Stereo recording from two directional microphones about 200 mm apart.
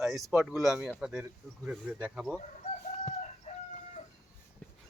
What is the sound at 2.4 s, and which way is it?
Chicken, 35° left (ahead or behind).